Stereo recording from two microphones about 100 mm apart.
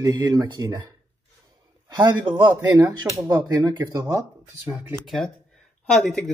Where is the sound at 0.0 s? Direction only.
35° right (ahead or behind).